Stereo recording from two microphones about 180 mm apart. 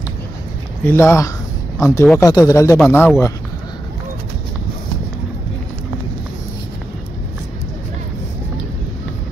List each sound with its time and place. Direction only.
0.8 s speech: 15° left (ahead or behind)